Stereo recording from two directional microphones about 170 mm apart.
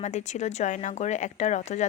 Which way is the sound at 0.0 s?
40° left (ahead or behind).